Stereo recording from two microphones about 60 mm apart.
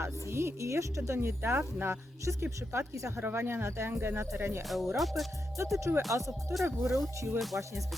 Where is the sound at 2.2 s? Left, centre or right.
Right.